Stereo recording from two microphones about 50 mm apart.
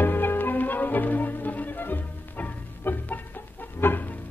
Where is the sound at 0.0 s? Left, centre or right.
Left.